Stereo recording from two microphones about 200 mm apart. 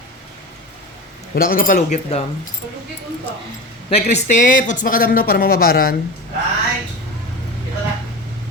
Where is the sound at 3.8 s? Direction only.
30° left (ahead or behind); by 5.9 s 50° left (ahead or behind).